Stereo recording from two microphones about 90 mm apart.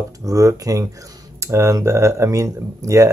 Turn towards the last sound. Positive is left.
turn(degrees=-35)  # may be behind; listen again after turning